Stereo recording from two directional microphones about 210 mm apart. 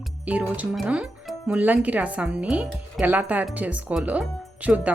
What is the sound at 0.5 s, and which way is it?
Speech, 5° right (ahead or behind).